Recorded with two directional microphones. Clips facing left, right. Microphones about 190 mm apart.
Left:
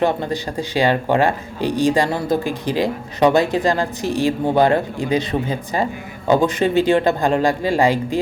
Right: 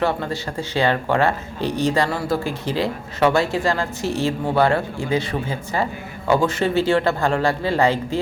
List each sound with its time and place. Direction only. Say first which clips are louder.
0.0 s speech: left 3 dB; 15° left (ahead or behind)